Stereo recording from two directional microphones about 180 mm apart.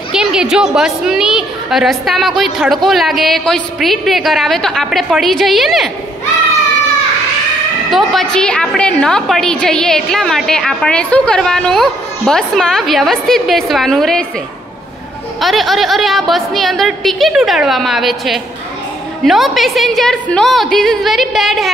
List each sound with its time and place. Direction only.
0.1 s a woman's voice: 5° right (ahead or behind)
7.9 s a woman's voice: centre (ahead or behind)
15.4 s a woman's voice: centre (ahead or behind)